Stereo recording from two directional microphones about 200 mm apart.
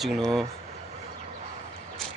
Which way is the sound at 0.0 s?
Centre (ahead or behind).